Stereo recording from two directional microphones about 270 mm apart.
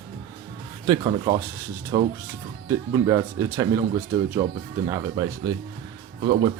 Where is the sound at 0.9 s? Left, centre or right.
Centre.